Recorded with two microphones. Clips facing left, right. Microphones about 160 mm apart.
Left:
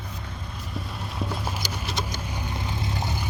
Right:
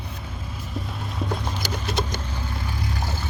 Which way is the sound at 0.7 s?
Centre (ahead or behind).